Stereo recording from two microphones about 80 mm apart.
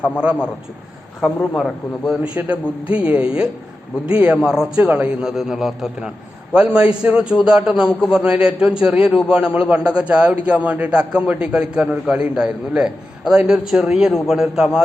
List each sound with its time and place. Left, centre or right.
0.0 s a man's voice: centre
2.2 s a man's voice: centre